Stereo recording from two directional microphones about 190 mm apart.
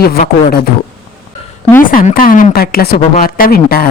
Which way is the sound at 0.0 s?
55° left (ahead or behind).